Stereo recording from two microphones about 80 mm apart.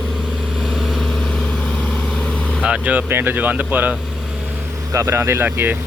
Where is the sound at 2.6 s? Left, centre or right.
Centre.